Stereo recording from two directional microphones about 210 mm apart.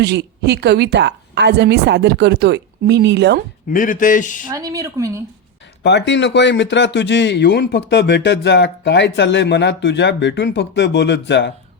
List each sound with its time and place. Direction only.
0.0 s a woman's voice: 55° right (ahead or behind)
3.7 s a man's voice: 40° left (ahead or behind)
4.5 s speech: 15° right (ahead or behind)
5.8 s speech: 55° left (ahead or behind)